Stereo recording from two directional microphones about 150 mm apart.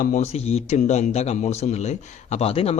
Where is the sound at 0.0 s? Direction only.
55° left (ahead or behind).